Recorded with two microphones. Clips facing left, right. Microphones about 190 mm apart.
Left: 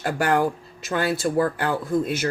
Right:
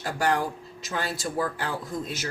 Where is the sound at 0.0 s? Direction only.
60° left (ahead or behind).